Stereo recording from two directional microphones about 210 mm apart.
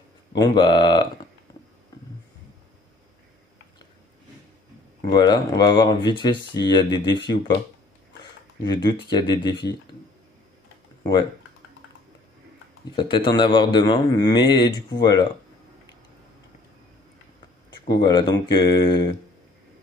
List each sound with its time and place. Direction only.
0.4 s a man's voice: 20° left (ahead or behind)
5.0 s a man's voice: 20° left (ahead or behind)
8.6 s a man's voice: 20° left (ahead or behind)
12.9 s a man's voice: 20° left (ahead or behind)
17.6 s a man's voice: 20° left (ahead or behind)